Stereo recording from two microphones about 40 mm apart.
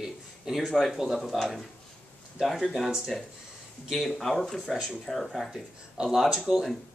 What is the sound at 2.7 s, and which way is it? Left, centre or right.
Speech, centre.